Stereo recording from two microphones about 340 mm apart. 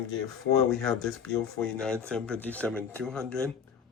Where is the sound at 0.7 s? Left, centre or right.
Centre.